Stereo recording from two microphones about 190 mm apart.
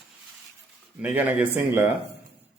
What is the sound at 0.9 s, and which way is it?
Speech, 10° right (ahead or behind).